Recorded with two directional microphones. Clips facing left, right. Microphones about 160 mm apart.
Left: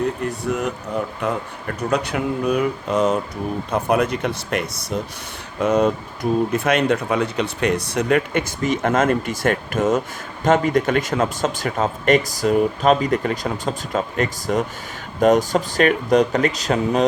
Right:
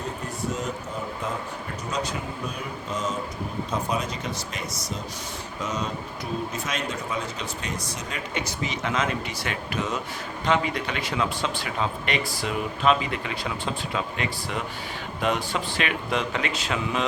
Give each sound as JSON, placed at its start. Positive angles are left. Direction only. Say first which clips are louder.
{"t": 0.2, "sound": "speech", "louder": "left 7 dB", "side_deg": 65}